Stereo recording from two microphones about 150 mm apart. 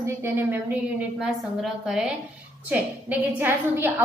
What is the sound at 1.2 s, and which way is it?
A woman's voice, 5° right (ahead or behind).